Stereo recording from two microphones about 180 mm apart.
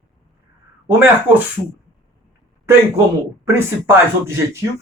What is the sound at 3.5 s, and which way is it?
A man's voice, 15° right (ahead or behind).